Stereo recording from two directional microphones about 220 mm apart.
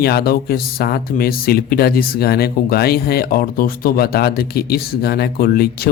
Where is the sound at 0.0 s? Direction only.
45° left (ahead or behind).